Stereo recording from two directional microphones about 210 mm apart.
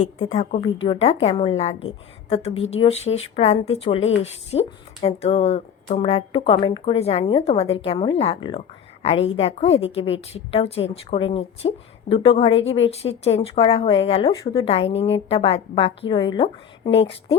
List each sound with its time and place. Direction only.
0.0 s a woman's voice: 35° left (ahead or behind)